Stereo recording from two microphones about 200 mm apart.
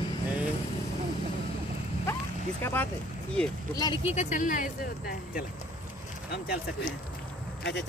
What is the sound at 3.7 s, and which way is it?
Speech, 20° left (ahead or behind).